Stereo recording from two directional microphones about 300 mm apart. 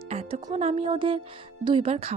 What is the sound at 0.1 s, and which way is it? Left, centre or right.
Speech, right.